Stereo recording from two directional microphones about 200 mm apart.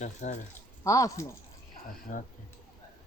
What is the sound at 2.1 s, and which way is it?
Speech, 40° left (ahead or behind).